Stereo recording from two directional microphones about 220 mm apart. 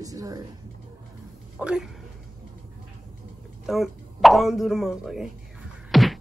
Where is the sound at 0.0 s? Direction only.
15° right (ahead or behind).